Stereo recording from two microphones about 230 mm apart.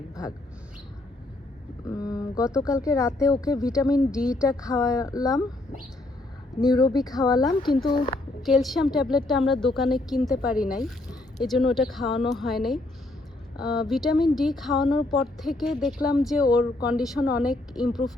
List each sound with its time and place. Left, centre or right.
1.9 s speech: centre
3.9 s speech: centre
4.4 s speech: centre
6.6 s speech: centre
7.9 s speech: left
8.4 s speech: centre